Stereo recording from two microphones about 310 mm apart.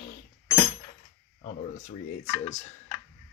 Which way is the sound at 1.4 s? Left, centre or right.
Left.